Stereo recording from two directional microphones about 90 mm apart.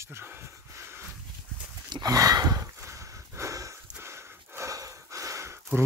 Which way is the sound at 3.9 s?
30° right (ahead or behind).